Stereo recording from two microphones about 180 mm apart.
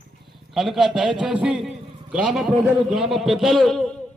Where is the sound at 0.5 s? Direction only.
Centre (ahead or behind).